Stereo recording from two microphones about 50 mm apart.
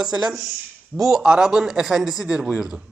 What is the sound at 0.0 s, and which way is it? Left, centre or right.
A man's voice, centre.